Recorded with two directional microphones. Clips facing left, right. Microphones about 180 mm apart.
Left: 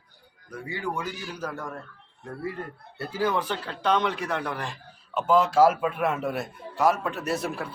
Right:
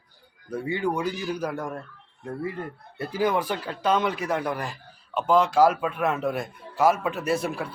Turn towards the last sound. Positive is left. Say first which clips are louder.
# right 3 dB
turn(degrees=0)  # may be behind; listen again after turning